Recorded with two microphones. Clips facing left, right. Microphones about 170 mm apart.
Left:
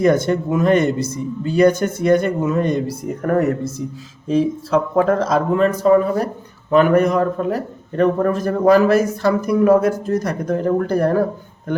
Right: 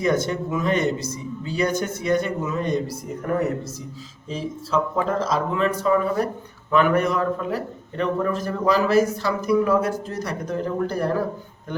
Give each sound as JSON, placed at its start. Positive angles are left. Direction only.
{"t": 0.0, "sound": "a man's voice", "side_deg": 55}